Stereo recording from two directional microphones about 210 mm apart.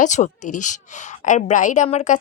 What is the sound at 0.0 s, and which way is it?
A woman's voice, 35° left (ahead or behind).